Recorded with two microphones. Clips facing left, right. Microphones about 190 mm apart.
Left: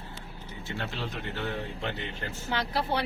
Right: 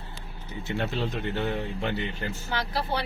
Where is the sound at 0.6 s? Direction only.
20° right (ahead or behind).